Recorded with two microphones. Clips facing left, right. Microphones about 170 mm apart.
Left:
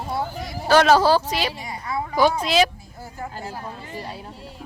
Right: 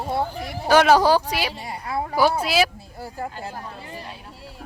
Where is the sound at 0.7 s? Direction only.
10° right (ahead or behind).